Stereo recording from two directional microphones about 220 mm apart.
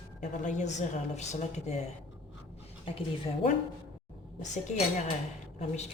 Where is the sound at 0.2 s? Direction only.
35° left (ahead or behind).